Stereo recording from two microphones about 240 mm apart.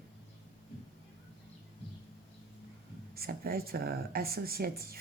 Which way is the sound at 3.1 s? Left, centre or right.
Right.